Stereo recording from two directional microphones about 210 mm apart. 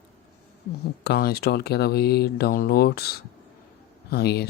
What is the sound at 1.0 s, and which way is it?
Speech, 50° left (ahead or behind).